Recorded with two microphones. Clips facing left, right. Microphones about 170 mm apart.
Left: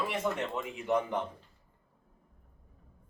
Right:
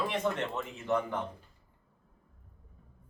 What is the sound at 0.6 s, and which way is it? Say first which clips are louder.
Speech: left 1 dB; 15° left (ahead or behind).